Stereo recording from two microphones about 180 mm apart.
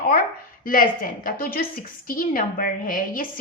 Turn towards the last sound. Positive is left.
turn(degrees=50)  # may be behind; listen again after turning